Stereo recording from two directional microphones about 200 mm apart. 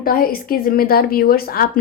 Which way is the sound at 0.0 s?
45° left (ahead or behind).